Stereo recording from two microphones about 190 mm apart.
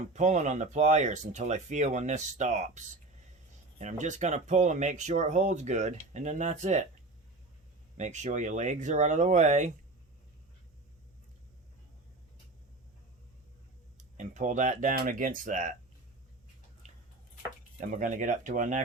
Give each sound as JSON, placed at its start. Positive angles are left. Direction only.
{"t": 0.1, "sound": "speech", "side_deg": -40}
{"t": 7.9, "sound": "speech", "side_deg": -40}
{"t": 14.2, "sound": "speech", "side_deg": -40}
{"t": 16.8, "sound": "a sound", "side_deg": -40}
{"t": 17.6, "sound": "speech", "side_deg": -45}